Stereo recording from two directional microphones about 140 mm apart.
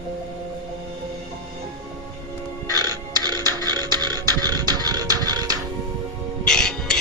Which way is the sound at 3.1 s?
30° right (ahead or behind).